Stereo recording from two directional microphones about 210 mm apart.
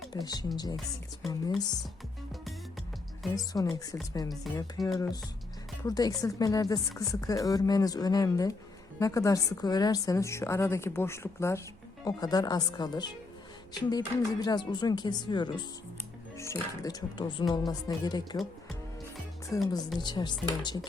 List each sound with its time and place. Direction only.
0.1 s speech: 20° left (ahead or behind)
3.3 s speech: 15° left (ahead or behind)
19.5 s speech: 15° left (ahead or behind)